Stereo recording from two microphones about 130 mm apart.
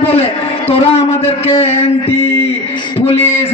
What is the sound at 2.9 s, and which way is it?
Speech, 50° left (ahead or behind).